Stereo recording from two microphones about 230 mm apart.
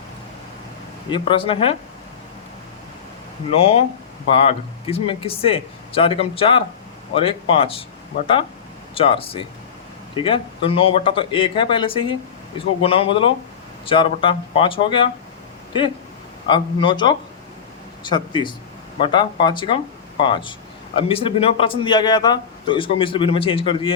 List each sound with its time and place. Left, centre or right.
1.1 s a man's voice: left
3.5 s a man's voice: left
4.9 s a man's voice: left
9.0 s a man's voice: left
16.5 s a man's voice: left